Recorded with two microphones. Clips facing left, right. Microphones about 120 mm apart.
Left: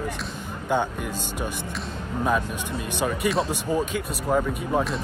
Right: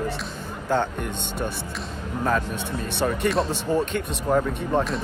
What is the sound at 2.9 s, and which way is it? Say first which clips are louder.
Speech: right 1 dB; 10° left (ahead or behind).